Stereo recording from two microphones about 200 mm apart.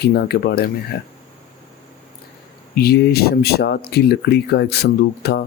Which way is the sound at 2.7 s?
50° left (ahead or behind).